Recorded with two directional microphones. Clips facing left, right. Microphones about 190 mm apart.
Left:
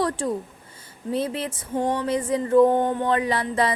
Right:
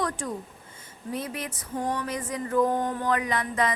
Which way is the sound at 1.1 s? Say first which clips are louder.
Left 7 dB; 30° left (ahead or behind).